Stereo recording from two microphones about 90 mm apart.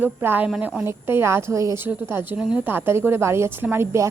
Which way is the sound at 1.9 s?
20° right (ahead or behind).